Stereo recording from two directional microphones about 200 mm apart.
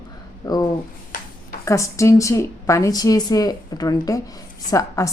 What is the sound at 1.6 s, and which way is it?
A woman's voice, 15° left (ahead or behind).